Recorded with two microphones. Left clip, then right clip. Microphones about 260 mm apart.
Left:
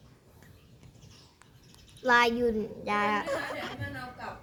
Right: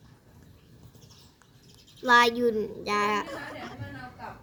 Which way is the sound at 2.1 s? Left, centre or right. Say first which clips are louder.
Right 3 dB; right.